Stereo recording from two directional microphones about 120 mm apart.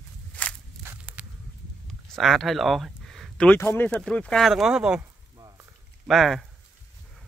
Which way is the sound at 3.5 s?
15° left (ahead or behind).